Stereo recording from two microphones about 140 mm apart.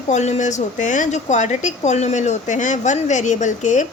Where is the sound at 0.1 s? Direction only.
55° left (ahead or behind).